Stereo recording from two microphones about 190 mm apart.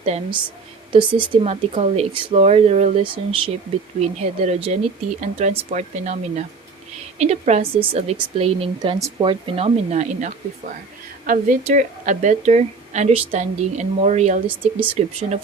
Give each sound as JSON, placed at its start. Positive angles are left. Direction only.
{"t": 0.0, "sound": "a woman's voice", "side_deg": -30}
{"t": 14.4, "sound": "speech", "side_deg": -10}